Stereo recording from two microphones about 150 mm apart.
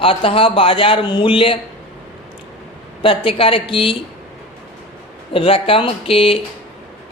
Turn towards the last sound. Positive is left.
turn(degrees=40)  # may be behind; listen again after turning